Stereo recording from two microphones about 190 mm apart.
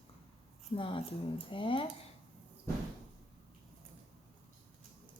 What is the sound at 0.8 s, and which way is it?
Speech, 25° left (ahead or behind).